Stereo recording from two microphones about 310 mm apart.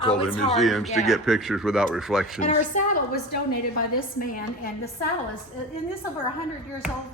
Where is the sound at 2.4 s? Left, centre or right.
Left.